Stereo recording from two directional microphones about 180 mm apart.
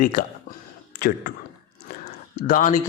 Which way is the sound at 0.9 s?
60° left (ahead or behind).